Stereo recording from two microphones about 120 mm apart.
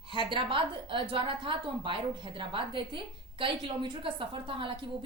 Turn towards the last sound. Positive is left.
turn(degrees=-45)  # may be behind; listen again after turning